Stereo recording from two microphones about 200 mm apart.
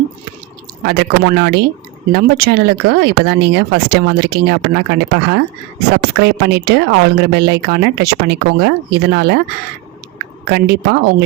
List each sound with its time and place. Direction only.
0.9 s speech: 50° right (ahead or behind)
10.4 s speech: 55° right (ahead or behind)